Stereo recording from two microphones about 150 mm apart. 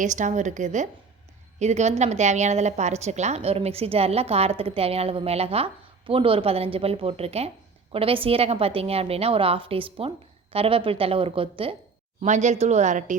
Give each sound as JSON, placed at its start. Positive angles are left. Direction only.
{"t": 0.0, "sound": "a woman's voice", "side_deg": -55}
{"t": 12.2, "sound": "a woman's voice", "side_deg": -55}